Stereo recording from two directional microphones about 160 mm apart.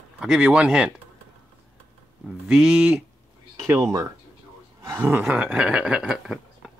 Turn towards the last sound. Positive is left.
turn(degrees=0)  # may be behind; listen again after turning